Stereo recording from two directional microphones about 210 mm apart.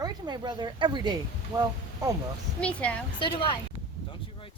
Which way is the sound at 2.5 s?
5° left (ahead or behind).